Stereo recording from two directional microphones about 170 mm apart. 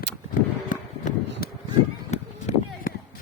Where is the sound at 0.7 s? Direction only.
50° left (ahead or behind).